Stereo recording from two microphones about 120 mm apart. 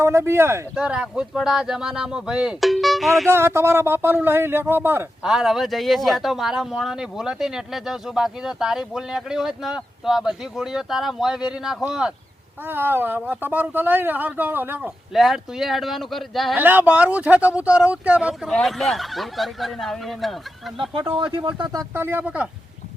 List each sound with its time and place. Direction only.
0.0 s speech: 25° right (ahead or behind)
0.8 s speech: 10° right (ahead or behind)
3.2 s speech: 20° right (ahead or behind)
5.2 s speech: 5° right (ahead or behind)
12.6 s speech: 15° right (ahead or behind)
15.1 s speech: centre (ahead or behind)
16.6 s speech: 15° right (ahead or behind)
18.4 s speech: centre (ahead or behind)
21.1 s speech: 45° right (ahead or behind)
21.9 s speech: 20° right (ahead or behind)